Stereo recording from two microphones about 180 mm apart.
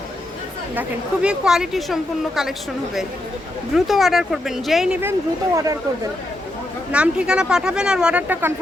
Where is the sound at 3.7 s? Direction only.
Centre (ahead or behind); by 6.1 s 20° right (ahead or behind).